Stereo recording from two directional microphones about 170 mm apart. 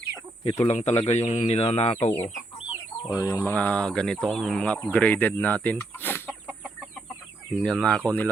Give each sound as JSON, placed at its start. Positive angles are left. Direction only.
{"t": 0.6, "sound": "speech", "side_deg": 40}
{"t": 2.0, "sound": "speech", "side_deg": 15}
{"t": 3.5, "sound": "speech", "side_deg": 10}
{"t": 7.6, "sound": "speech", "side_deg": 5}